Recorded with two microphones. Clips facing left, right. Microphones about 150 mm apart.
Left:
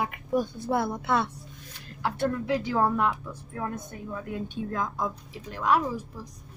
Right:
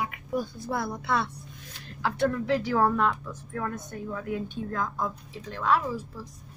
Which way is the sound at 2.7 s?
20° left (ahead or behind).